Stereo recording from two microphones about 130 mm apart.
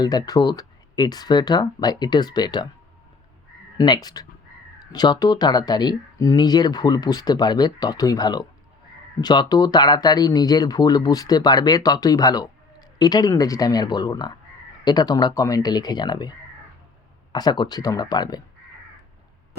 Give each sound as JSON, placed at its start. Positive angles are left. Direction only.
{"t": 0.0, "sound": "speech", "side_deg": 30}
{"t": 3.8, "sound": "speech", "side_deg": 30}
{"t": 17.3, "sound": "speech", "side_deg": 30}